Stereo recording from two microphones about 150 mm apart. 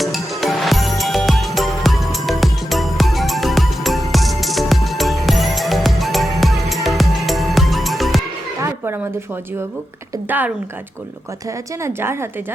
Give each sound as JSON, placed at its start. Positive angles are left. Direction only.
{"t": 0.0, "sound": "music", "side_deg": 0}
{"t": 8.6, "sound": "a sound", "side_deg": -15}
{"t": 10.2, "sound": "a woman's voice", "side_deg": -10}
{"t": 11.8, "sound": "a woman's voice", "side_deg": -15}